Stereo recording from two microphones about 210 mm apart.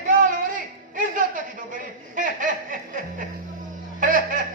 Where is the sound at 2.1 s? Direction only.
40° right (ahead or behind).